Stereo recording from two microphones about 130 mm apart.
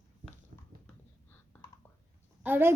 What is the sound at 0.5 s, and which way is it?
Clip-clop, 70° right (ahead or behind).